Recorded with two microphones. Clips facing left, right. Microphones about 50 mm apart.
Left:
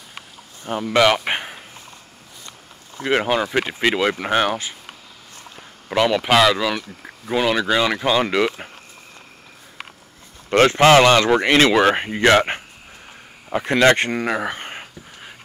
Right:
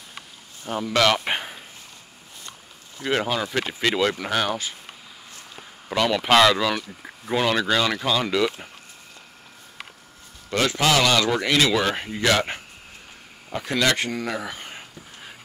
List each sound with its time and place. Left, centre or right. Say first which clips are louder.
0.7 s speech: left 4 dB; centre
3.1 s speech: left 5 dB; left
5.9 s speech: left 3 dB; centre; by 8.6 s left
10.5 s speech: left 9 dB; left